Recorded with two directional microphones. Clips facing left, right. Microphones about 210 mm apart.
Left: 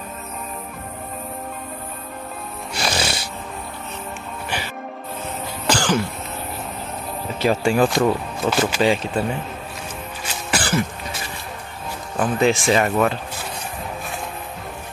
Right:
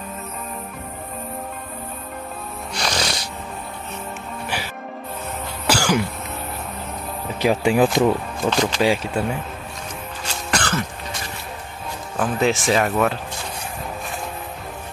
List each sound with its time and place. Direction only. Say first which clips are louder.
2.7 s music: left 1 dB; 5° left (ahead or behind)
5.7 s throat clearing: even; 10° right (ahead or behind)
7.3 s speech: right 1 dB; 15° right (ahead or behind)
7.8 s speech: right 1 dB; centre (ahead or behind)
8.8 s speech: left 1 dB; 10° right (ahead or behind)
10.2 s throat clearing: even; 10° left (ahead or behind)
12.2 s speech: left 2 dB; centre (ahead or behind)